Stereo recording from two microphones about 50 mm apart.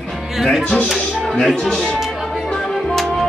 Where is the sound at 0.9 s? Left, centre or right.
Centre.